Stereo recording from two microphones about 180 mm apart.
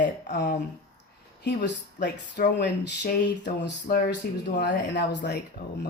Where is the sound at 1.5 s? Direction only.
70° left (ahead or behind).